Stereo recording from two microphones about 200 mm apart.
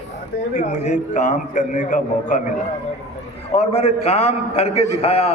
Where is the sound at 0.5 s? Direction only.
35° left (ahead or behind).